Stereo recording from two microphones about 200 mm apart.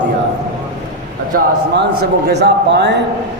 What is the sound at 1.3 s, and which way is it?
A man's voice, 45° right (ahead or behind).